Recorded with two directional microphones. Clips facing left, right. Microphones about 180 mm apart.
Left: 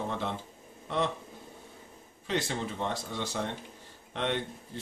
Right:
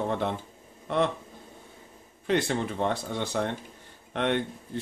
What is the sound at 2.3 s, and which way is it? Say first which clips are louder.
Speech: right 6 dB; 55° right (ahead or behind).